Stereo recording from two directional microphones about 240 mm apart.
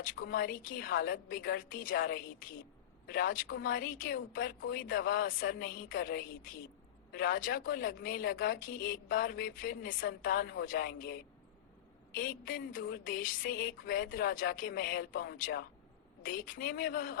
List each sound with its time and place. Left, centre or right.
0.3 s a woman's voice: left